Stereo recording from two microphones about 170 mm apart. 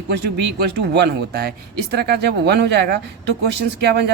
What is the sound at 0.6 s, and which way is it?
Speech, 70° right (ahead or behind).